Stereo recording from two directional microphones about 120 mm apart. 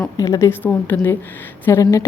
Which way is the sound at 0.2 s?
25° left (ahead or behind).